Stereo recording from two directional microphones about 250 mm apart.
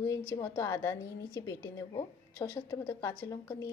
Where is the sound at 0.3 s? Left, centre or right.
Centre.